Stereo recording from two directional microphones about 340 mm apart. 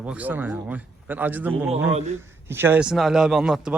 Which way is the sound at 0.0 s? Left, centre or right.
Centre.